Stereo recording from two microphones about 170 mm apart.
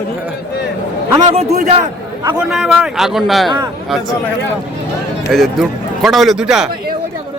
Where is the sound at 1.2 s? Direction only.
40° right (ahead or behind).